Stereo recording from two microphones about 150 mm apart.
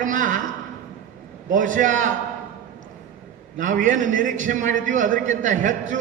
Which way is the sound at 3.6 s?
60° right (ahead or behind).